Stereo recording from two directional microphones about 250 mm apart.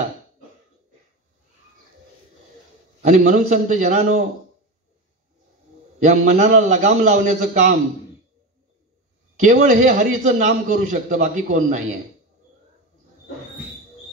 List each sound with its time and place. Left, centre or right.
3.0 s a man's voice: right
5.9 s a man's voice: right
9.4 s a man's voice: right